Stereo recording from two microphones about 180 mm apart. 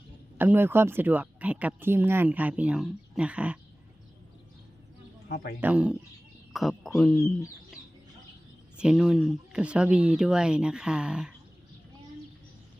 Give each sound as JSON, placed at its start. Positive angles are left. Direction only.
{"t": 0.3, "sound": "speech", "side_deg": -10}
{"t": 5.3, "sound": "a man's voice", "side_deg": 60}
{"t": 5.5, "sound": "speech", "side_deg": -10}
{"t": 8.8, "sound": "speech", "side_deg": -5}